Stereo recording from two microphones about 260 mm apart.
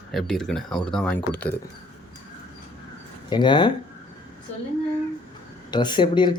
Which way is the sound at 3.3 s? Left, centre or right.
Centre.